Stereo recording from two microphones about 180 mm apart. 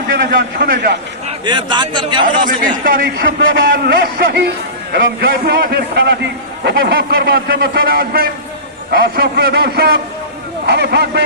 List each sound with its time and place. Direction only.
0.6 s a man's voice: 60° right (ahead or behind)
1.5 s a man's voice: 25° right (ahead or behind)
2.2 s a man's voice: 50° right (ahead or behind)
3.2 s a man's voice: 75° right (ahead or behind)